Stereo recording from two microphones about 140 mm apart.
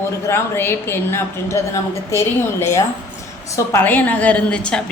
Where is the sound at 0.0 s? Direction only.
15° left (ahead or behind).